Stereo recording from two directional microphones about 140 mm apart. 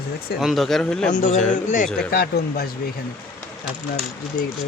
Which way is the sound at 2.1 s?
90° left.